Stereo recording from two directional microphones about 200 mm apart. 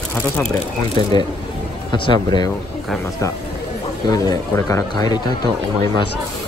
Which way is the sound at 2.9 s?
Centre (ahead or behind).